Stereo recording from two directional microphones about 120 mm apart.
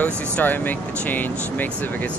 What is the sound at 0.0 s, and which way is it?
Speech, 15° left (ahead or behind).